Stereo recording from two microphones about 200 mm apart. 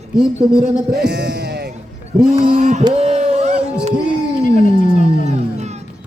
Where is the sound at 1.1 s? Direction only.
55° right (ahead or behind).